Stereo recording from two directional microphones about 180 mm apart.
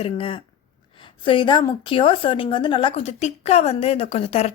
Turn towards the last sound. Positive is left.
turn(degrees=35)  # may be behind; listen again after turning